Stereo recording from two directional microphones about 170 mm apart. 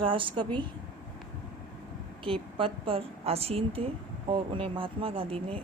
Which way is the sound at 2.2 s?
30° right (ahead or behind).